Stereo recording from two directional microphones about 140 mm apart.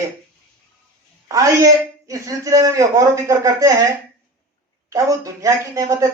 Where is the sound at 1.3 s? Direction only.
25° right (ahead or behind).